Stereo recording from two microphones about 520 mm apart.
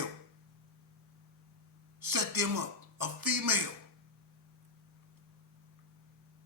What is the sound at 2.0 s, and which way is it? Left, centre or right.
Speech, right.